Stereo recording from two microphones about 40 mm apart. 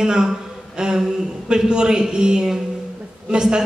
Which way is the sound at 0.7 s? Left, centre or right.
Centre.